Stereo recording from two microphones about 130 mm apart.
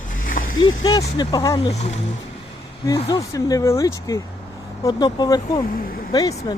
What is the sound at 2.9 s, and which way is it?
Speech, 25° left (ahead or behind).